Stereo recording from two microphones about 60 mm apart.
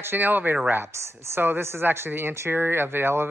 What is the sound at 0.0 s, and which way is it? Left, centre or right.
Speech, right.